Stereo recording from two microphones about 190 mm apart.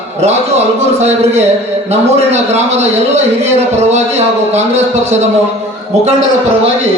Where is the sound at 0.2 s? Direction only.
35° right (ahead or behind).